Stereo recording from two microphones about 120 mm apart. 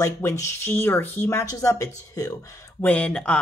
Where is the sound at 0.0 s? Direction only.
25° left (ahead or behind).